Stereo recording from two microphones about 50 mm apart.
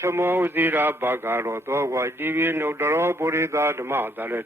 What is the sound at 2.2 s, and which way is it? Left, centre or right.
A man's voice, right.